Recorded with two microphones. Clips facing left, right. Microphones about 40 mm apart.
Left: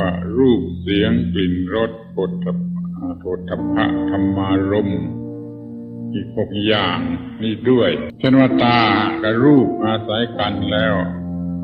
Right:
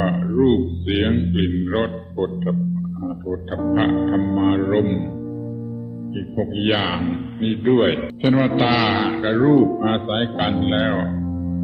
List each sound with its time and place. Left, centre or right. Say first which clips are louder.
0.0 s speech: left 2 dB; centre
1.6 s speech: left 2 dB; centre
3.0 s speech: left 4 dB; left
3.6 s a man's voice: even; centre
6.1 s a man's voice: left 2 dB; centre